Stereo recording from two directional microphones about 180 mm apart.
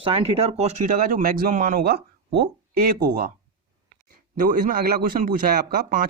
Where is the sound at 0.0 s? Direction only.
30° right (ahead or behind); by 3.2 s 55° right (ahead or behind).